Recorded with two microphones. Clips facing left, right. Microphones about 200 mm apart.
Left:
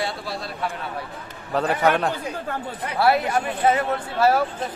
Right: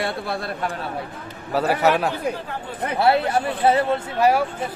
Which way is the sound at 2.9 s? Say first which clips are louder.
Right 1 dB; 25° right (ahead or behind).